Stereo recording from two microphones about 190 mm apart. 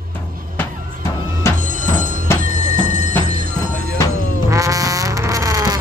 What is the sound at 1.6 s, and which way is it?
Telephone bell ringing, 45° right (ahead or behind).